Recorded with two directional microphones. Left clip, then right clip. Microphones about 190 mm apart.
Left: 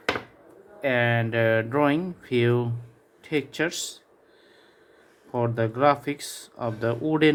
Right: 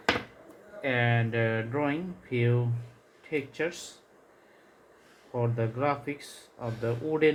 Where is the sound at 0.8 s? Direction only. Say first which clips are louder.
Left 5 dB; 35° left (ahead or behind); by 3.8 s 60° left (ahead or behind).